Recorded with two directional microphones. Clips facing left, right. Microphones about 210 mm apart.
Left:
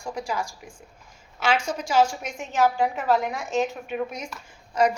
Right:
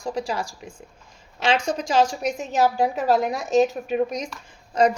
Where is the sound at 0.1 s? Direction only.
35° right (ahead or behind).